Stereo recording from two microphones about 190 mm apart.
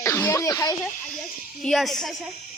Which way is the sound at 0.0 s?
15° left (ahead or behind).